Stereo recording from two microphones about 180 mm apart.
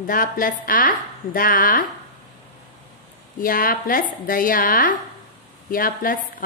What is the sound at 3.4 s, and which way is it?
A woman's voice, 50° left (ahead or behind).